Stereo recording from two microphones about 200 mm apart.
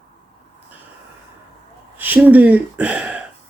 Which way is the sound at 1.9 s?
10° right (ahead or behind).